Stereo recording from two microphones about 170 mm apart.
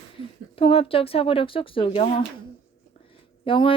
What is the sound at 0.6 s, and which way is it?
Speech, 35° left (ahead or behind).